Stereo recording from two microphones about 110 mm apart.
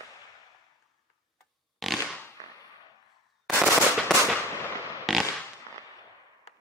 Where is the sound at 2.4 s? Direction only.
90° right.